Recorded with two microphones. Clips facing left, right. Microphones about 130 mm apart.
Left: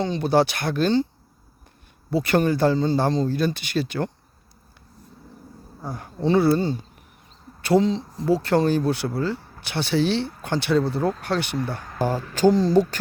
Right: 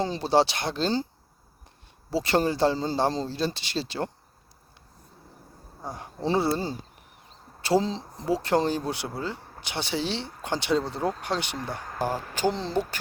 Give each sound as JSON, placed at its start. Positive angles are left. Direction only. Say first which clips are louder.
{"t": 0.0, "sound": "speech", "louder": "left 3 dB", "side_deg": -30}
{"t": 2.0, "sound": "speech", "louder": "left 4 dB", "side_deg": -25}
{"t": 5.8, "sound": "speech", "louder": "left 5 dB", "side_deg": -20}
{"t": 12.5, "sound": "speech", "louder": "left 9 dB", "side_deg": 10}